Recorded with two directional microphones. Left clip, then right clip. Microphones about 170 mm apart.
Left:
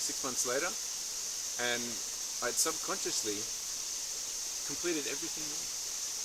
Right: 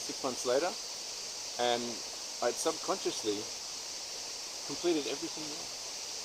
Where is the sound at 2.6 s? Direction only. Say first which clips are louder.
Right 1 dB; 20° left (ahead or behind).